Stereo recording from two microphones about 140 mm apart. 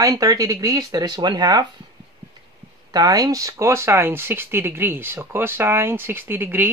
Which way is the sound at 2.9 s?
30° right (ahead or behind).